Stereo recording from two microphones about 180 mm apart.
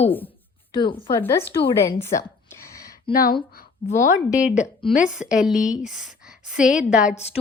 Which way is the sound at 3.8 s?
45° left (ahead or behind).